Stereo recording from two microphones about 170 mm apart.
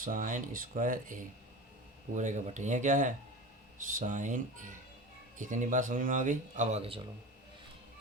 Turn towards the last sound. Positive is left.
turn(degrees=-35)  # may be behind; listen again after turning